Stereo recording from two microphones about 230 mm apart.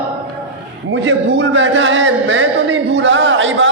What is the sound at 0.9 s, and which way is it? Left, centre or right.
A man's voice, right.